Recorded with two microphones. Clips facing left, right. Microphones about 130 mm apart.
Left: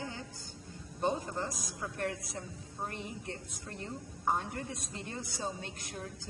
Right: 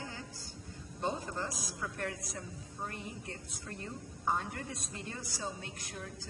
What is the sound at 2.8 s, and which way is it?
Speech, 20° left (ahead or behind).